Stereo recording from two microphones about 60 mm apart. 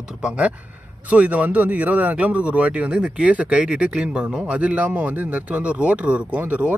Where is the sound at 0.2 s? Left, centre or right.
Right.